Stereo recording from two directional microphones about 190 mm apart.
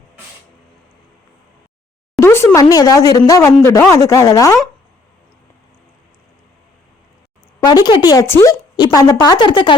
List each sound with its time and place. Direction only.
2.2 s speech: 10° left (ahead or behind)
7.6 s a woman's voice: 20° left (ahead or behind)